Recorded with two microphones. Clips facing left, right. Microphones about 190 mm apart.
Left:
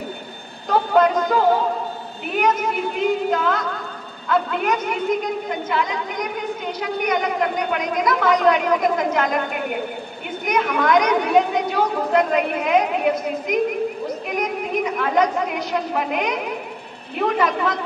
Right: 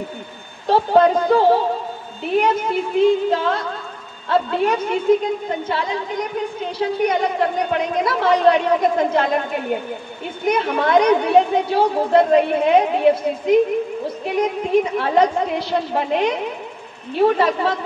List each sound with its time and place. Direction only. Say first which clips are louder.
0.7 s a woman's voice: right 3 dB; 30° right (ahead or behind)
10.4 s a woman's voice: right 2 dB; 30° right (ahead or behind)